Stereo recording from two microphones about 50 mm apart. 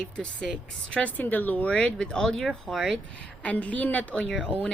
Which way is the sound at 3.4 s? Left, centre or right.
Left.